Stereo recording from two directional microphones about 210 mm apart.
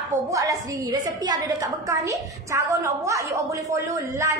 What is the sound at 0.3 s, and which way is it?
A woman's voice, 15° right (ahead or behind).